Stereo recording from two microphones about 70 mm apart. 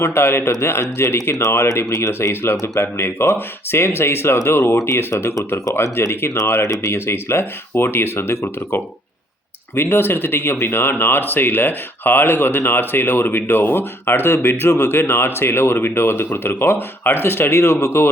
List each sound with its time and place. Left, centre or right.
0.0 s speech: left